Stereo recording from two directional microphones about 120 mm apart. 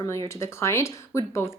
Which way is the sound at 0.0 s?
25° left (ahead or behind).